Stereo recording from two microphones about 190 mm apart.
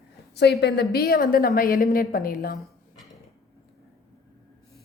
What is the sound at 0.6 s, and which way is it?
A woman's voice, 60° left (ahead or behind).